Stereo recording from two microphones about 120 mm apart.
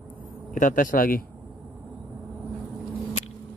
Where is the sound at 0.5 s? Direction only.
90° left.